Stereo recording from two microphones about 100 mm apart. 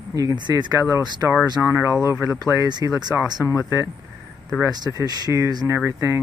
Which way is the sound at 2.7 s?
45° right (ahead or behind).